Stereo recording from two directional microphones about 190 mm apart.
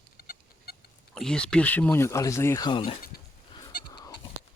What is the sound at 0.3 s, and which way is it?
Chicken, 55° left (ahead or behind).